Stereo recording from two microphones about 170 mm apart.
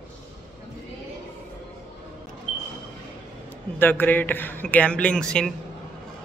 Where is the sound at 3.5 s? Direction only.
10° left (ahead or behind).